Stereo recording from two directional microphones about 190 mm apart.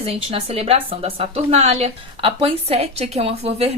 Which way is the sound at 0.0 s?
30° right (ahead or behind).